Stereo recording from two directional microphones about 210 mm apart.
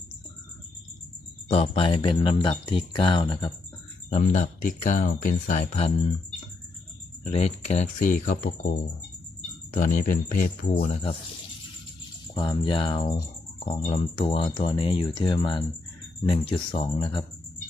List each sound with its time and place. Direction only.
1.5 s speech: 25° left (ahead or behind)
4.1 s speech: 35° left (ahead or behind)
7.3 s speech: 30° left (ahead or behind)
12.3 s speech: 20° left (ahead or behind)